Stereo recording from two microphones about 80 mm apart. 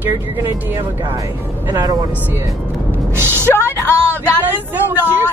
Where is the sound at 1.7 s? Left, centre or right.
Right.